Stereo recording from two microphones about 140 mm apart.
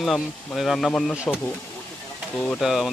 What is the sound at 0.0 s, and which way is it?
Speech, centre (ahead or behind).